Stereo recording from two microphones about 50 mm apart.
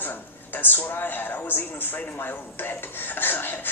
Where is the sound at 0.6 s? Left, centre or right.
Left.